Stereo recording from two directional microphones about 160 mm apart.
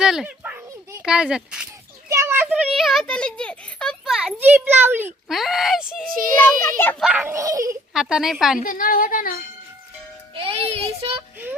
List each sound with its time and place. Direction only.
0.0 s a child's voice: 5° right (ahead or behind)
2.0 s a sound: 15° right (ahead or behind)
2.5 s a child's voice: centre (ahead or behind)
5.3 s a child's voice: centre (ahead or behind)
6.4 s a child's voice: 15° left (ahead or behind)
7.0 s speech: 10° right (ahead or behind)
7.9 s a child's voice: centre (ahead or behind)
8.6 s a woman's voice: 60° left (ahead or behind)
10.3 s child singing: 35° right (ahead or behind)